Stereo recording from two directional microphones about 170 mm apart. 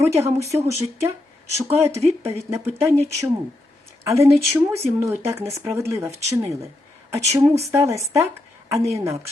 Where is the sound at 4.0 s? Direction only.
15° right (ahead or behind).